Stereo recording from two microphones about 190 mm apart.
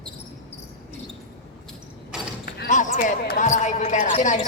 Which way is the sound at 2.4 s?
45° left (ahead or behind).